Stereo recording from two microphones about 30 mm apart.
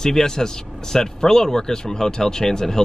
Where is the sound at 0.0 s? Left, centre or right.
Centre.